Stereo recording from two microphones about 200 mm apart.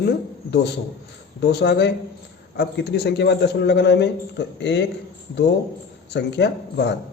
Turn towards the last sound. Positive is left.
turn(degrees=55)  # may be behind; listen again after turning